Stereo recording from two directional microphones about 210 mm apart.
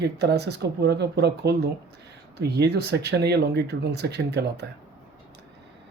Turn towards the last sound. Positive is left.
turn(degrees=-50)  # may be behind; listen again after turning